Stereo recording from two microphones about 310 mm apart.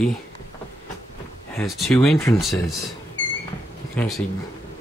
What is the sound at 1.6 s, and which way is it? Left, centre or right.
Speech, centre.